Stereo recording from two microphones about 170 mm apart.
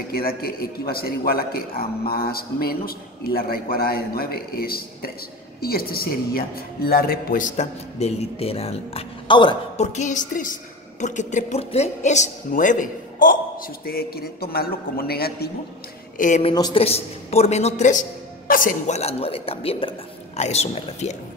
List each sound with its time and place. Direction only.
0.1 s a man's voice: 60° left (ahead or behind); by 9.6 s 30° left (ahead or behind)
9.8 s a woman's voice: 45° left (ahead or behind); by 15.5 s 65° left (ahead or behind)
16.2 s a woman's voice: 45° left (ahead or behind)
16.5 s a man's voice: 25° left (ahead or behind)
16.8 s a woman's voice: 35° left (ahead or behind)